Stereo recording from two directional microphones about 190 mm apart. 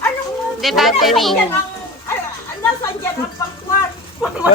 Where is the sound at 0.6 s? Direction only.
Centre (ahead or behind).